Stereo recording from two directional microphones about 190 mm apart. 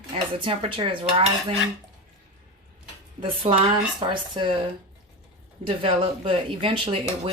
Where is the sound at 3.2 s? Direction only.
30° right (ahead or behind).